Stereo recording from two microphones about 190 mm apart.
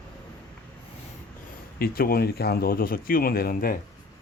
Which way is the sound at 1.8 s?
50° left (ahead or behind).